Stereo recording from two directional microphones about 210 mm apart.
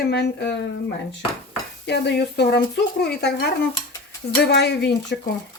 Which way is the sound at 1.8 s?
55° left (ahead or behind).